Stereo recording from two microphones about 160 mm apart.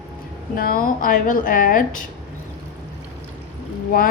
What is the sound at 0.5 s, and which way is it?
A woman's voice, 65° left (ahead or behind).